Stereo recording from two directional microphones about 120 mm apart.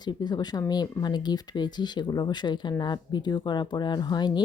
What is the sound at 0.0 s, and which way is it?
Speech, 35° left (ahead or behind).